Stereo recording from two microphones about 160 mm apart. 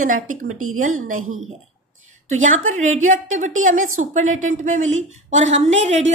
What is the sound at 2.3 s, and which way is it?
A woman's voice, 50° right (ahead or behind).